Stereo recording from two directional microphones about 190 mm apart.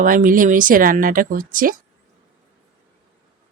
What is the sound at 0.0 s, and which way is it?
Speech, 45° right (ahead or behind).